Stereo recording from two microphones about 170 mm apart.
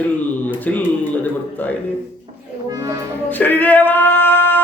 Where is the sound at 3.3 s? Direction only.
10° left (ahead or behind).